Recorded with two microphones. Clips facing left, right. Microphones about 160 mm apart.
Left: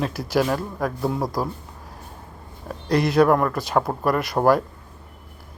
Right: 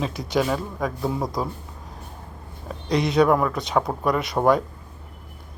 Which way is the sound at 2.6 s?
Centre (ahead or behind).